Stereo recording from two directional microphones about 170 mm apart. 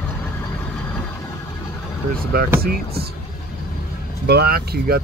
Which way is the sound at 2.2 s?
60° right (ahead or behind).